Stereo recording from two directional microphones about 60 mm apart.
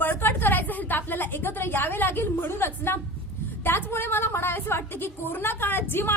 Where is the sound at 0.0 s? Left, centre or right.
Left.